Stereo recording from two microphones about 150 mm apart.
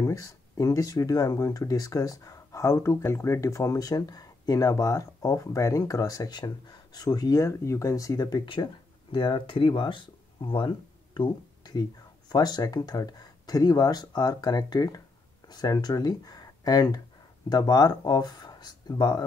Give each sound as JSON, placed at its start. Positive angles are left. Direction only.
{"t": 0.0, "sound": "speech", "side_deg": 20}